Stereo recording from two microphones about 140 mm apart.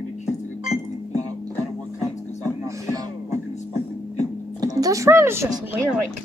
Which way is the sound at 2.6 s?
25° right (ahead or behind).